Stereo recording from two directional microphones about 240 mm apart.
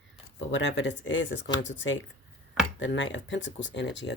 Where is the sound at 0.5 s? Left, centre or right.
Left.